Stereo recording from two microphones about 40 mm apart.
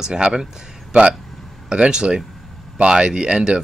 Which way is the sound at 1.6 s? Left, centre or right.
Right.